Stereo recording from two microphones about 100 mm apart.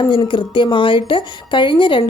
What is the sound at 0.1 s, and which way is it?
Speech, 55° left (ahead or behind).